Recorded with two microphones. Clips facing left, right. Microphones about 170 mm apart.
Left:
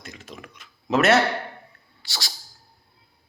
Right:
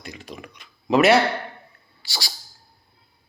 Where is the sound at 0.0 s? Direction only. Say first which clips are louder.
Right 3 dB; centre (ahead or behind).